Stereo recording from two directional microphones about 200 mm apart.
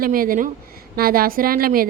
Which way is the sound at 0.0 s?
45° right (ahead or behind).